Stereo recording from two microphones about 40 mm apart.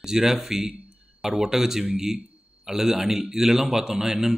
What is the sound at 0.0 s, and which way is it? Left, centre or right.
A man's voice, centre.